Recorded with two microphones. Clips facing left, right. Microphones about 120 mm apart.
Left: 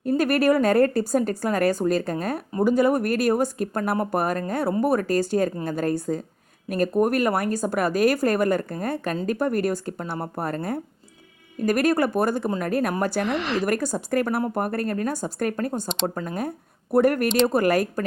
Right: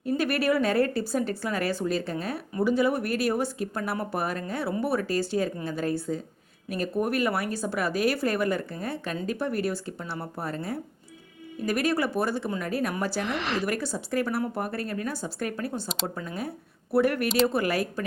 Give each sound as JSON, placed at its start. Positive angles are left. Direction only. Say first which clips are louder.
{"t": 0.0, "sound": "a woman's voice", "louder": "left 5 dB", "side_deg": 45}